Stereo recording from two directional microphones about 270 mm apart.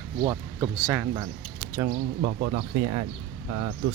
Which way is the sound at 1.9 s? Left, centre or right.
Right.